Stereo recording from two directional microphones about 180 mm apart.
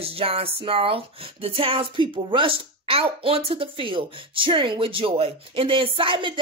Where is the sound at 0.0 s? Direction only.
30° right (ahead or behind).